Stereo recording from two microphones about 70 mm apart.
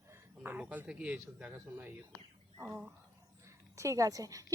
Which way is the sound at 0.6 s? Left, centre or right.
Centre.